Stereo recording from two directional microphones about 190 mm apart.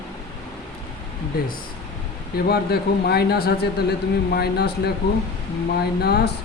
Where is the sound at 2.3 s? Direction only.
55° left (ahead or behind).